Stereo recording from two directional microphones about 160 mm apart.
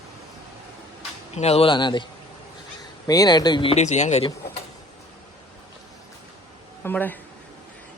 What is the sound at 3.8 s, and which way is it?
Speech, 45° left (ahead or behind).